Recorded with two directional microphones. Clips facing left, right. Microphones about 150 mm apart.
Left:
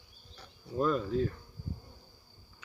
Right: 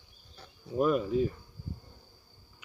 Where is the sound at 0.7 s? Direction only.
10° right (ahead or behind).